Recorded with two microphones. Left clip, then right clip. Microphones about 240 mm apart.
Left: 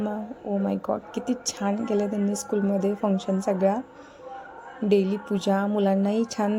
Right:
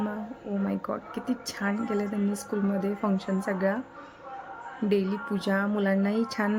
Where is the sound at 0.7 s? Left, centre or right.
Centre.